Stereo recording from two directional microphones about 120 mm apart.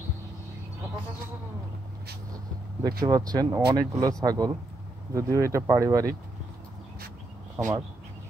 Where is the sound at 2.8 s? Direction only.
35° right (ahead or behind).